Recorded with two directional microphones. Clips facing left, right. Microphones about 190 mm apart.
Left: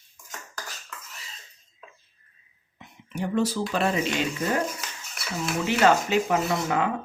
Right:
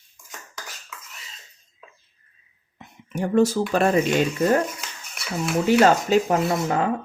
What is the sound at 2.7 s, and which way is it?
Speech, 45° right (ahead or behind).